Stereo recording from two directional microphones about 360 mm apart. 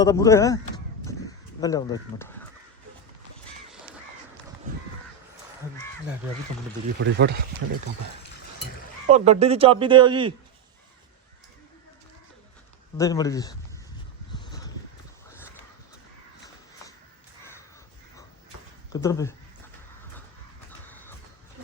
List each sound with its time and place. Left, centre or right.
0.0 s speech: centre
1.6 s speech: centre
7.0 s speech: right
9.0 s a man's voice: centre
13.0 s speech: centre
14.3 s a sound: centre
18.9 s speech: centre
20.7 s a sound: centre